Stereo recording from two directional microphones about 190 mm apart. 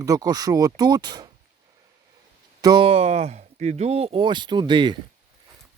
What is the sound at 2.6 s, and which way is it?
Speech, 25° right (ahead or behind).